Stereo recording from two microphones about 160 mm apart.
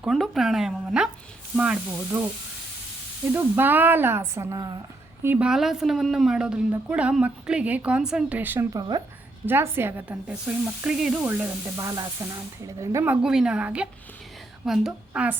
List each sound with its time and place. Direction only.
0.0 s speech: centre (ahead or behind)
3.3 s speech: 15° right (ahead or behind)
5.2 s speech: 10° right (ahead or behind)
13.2 s a woman's voice: 5° right (ahead or behind)